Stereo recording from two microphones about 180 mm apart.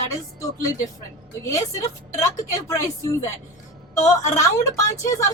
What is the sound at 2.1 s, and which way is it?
Speech, 15° left (ahead or behind).